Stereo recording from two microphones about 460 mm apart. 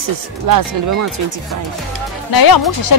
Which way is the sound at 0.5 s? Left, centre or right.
Right.